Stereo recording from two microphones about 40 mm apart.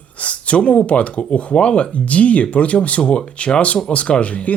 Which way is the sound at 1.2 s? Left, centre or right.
Left.